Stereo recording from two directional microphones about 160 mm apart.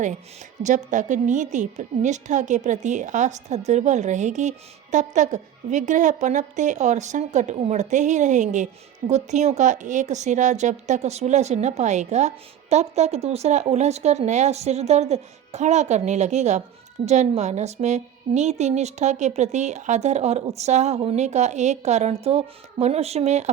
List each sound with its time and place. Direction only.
0.6 s a woman's voice: 50° right (ahead or behind)